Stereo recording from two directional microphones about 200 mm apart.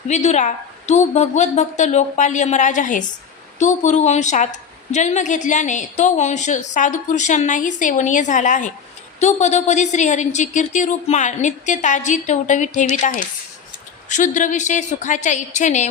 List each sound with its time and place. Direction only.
0.1 s a woman's voice: 35° left (ahead or behind)